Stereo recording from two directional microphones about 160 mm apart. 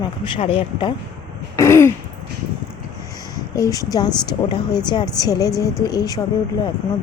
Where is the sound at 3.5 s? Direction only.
20° left (ahead or behind).